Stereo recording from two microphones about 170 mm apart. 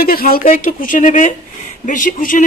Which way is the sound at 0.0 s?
60° left (ahead or behind).